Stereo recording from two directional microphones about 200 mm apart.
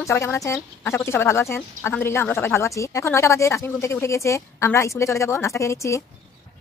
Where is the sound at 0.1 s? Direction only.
15° left (ahead or behind).